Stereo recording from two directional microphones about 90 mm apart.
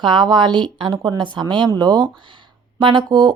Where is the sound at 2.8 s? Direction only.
60° right (ahead or behind).